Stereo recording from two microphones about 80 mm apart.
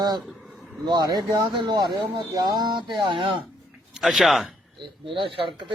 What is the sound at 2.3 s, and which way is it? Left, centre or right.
Speech, right.